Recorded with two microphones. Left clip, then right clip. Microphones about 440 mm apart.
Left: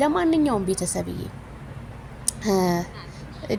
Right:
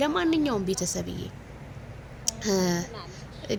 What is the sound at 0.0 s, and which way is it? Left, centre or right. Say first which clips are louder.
A woman's voice: left 4 dB; right.